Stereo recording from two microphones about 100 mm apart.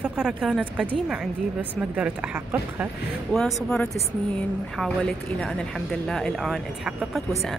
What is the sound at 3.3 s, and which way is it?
A woman's voice, 5° left (ahead or behind).